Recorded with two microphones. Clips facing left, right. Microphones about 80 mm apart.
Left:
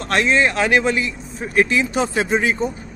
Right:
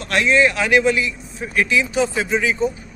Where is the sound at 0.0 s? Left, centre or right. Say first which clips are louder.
Right 1 dB; left.